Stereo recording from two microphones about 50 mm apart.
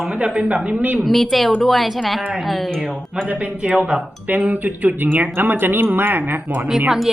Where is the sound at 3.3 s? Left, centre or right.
Right.